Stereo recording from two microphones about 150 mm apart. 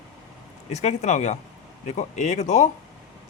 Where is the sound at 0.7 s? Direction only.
50° left (ahead or behind).